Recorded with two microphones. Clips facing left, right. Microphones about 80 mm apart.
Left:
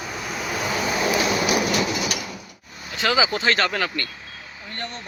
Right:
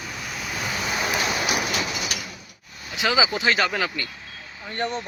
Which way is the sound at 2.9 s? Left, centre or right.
Centre.